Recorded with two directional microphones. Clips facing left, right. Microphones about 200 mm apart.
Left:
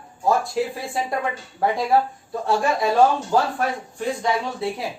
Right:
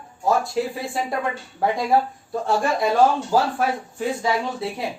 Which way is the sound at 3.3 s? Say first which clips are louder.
Even; 5° right (ahead or behind).